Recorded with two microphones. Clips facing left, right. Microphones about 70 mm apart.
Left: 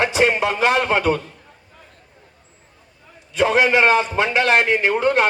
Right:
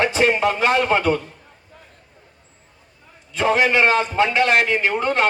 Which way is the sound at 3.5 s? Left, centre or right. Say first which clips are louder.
Left 1 dB; left.